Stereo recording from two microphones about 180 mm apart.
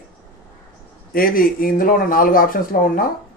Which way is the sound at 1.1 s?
55° left (ahead or behind).